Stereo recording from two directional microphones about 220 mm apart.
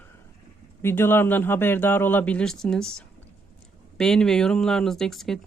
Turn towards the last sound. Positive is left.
turn(degrees=0)  # may be behind; listen again after turning